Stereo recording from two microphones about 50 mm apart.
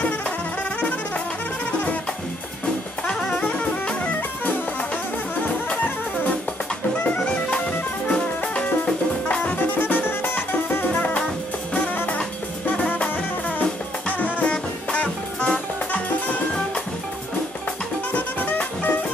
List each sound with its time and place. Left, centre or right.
0.7 s music: left
3.3 s music: left
8.1 s music: centre
9.4 s music: left
11.0 s music: left
13.6 s music: left
18.1 s music: left